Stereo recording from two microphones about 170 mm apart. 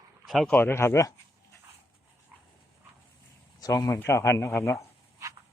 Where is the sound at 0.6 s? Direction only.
15° left (ahead or behind).